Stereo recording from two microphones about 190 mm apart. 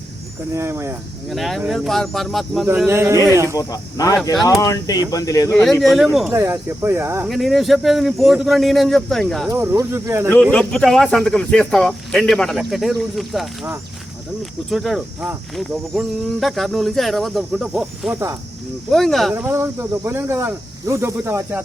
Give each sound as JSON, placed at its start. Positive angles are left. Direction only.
{"t": 0.5, "sound": "speech", "side_deg": -15}
{"t": 1.3, "sound": "speech", "side_deg": 0}
{"t": 2.6, "sound": "speech", "side_deg": -15}
{"t": 3.6, "sound": "speech", "side_deg": 20}
{"t": 5.8, "sound": "speech", "side_deg": 0}
{"t": 6.3, "sound": "speech", "side_deg": -15}
{"t": 7.3, "sound": "speech", "side_deg": 0}
{"t": 9.5, "sound": "speech", "side_deg": -15}
{"t": 10.4, "sound": "speech", "side_deg": 5}
{"t": 19.3, "sound": "speech", "side_deg": -10}